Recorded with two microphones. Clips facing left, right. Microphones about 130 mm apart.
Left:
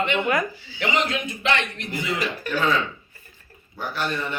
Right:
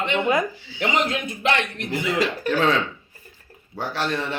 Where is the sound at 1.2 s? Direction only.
50° right (ahead or behind).